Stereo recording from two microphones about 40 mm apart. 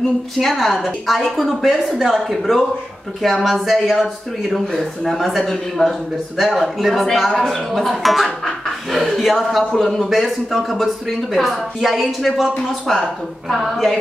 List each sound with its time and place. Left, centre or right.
0.4 s speech: centre
1.7 s speech: centre
5.0 s speech: centre
12.9 s speech: centre